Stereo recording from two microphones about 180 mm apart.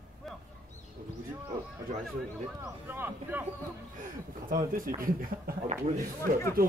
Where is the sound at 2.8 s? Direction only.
10° right (ahead or behind).